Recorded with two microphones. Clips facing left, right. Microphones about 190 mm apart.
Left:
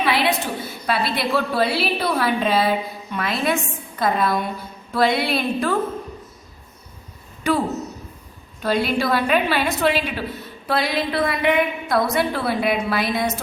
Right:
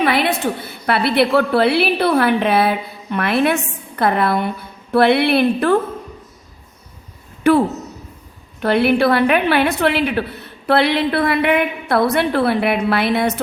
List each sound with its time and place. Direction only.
0.0 s a woman's voice: 50° right (ahead or behind)
8.6 s a woman's voice: 65° right (ahead or behind)